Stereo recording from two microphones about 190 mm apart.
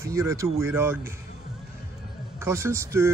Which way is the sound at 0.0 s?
15° right (ahead or behind).